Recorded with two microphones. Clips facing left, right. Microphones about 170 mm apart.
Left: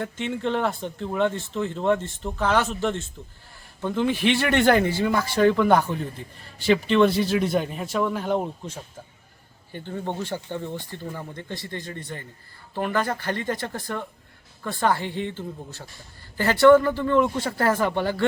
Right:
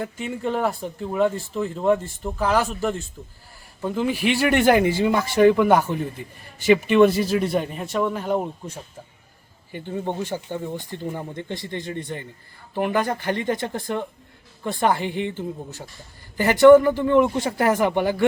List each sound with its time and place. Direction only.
0.0 s speech: 5° right (ahead or behind)
9.7 s speech: 15° right (ahead or behind)